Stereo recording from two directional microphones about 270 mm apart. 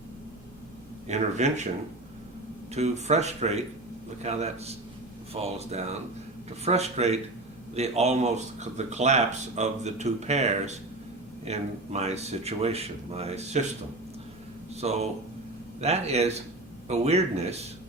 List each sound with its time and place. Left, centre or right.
1.0 s speech: right
2.7 s speech: right
14.8 s speech: right